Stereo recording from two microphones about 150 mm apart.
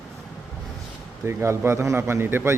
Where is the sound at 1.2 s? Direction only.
15° right (ahead or behind).